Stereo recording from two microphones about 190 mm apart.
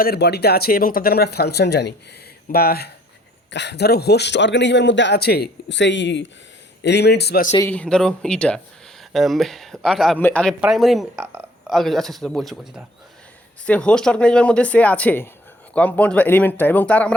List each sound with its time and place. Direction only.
0.0 s a man's voice: 55° left (ahead or behind)
6.8 s speech: 60° left (ahead or behind)
7.5 s speech: 10° left (ahead or behind)